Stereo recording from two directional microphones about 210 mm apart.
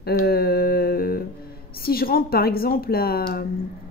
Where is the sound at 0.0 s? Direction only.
45° left (ahead or behind).